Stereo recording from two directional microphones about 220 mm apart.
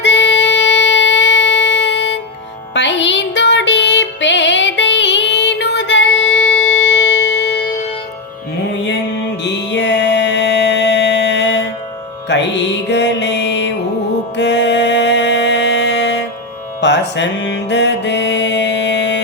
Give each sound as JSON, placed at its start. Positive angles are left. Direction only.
{"t": 0.0, "sound": "music", "side_deg": 55}
{"t": 9.4, "sound": "music", "side_deg": 50}